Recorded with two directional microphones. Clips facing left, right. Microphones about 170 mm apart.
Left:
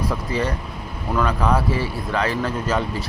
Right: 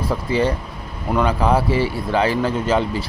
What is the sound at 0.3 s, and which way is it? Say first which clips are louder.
Speech: right 5 dB; 30° right (ahead or behind).